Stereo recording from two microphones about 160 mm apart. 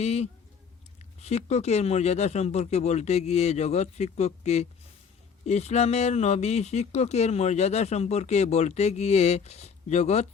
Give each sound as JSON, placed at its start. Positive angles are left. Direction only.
{"t": 0.0, "sound": "speech", "side_deg": 40}